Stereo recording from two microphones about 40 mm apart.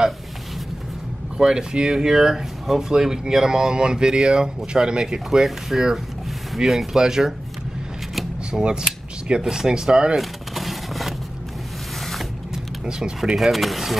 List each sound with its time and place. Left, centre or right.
1.4 s speech: centre
8.5 s speech: right
10.1 s vehicle: centre
13.4 s speech: centre